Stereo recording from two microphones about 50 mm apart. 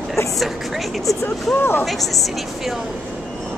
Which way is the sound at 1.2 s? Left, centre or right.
Left.